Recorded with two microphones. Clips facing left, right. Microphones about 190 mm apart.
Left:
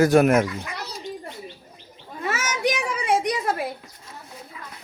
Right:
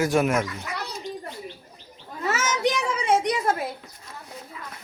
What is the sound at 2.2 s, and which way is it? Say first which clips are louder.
Children playing: right 1 dB; 15° left (ahead or behind).